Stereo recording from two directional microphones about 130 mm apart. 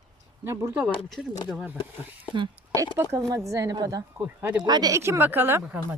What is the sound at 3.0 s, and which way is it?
Speech, 25° right (ahead or behind).